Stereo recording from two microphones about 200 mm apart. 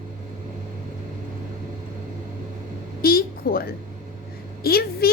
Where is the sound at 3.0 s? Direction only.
50° left (ahead or behind).